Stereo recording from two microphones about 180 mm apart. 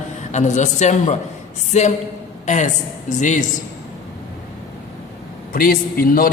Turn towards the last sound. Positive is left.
turn(degrees=55)  # may be behind; listen again after turning